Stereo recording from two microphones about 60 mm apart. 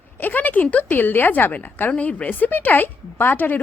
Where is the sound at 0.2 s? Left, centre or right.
Left.